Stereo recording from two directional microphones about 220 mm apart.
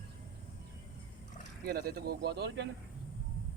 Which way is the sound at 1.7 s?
45° right (ahead or behind).